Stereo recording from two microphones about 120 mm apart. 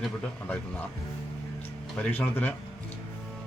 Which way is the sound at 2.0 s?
10° left (ahead or behind).